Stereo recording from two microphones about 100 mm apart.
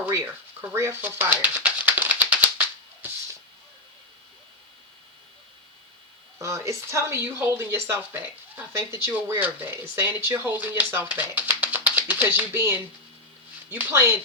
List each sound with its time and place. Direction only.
0.0 s a sound: 30° right (ahead or behind)
0.7 s speech: 25° right (ahead or behind)
2.0 s music: 15° right (ahead or behind)
6.4 s speech: 30° right (ahead or behind)